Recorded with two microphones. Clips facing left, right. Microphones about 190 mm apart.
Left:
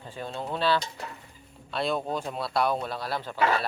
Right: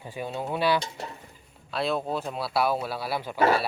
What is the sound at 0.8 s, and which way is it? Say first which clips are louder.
Dishes: right 2 dB; 25° right (ahead or behind).